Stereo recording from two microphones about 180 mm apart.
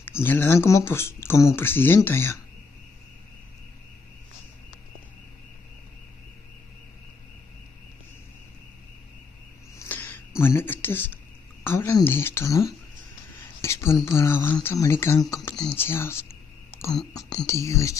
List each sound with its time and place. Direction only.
0.2 s speech: 10° left (ahead or behind)
9.8 s a sound: 10° left (ahead or behind)
11.6 s speech: 15° left (ahead or behind)